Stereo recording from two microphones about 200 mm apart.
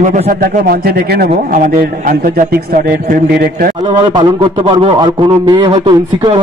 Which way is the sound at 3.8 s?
25° right (ahead or behind).